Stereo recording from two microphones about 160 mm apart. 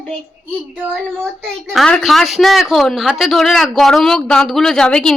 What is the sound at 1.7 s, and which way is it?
Speech, 5° left (ahead or behind).